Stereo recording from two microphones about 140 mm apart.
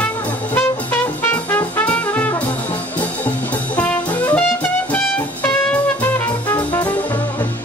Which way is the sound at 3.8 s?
10° left (ahead or behind).